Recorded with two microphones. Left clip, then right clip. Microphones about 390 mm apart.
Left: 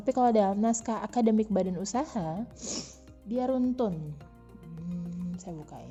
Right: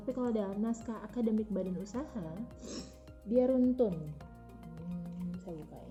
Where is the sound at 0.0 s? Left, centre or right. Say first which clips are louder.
Left 11 dB; left.